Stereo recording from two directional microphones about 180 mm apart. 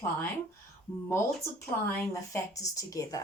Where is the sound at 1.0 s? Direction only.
15° left (ahead or behind).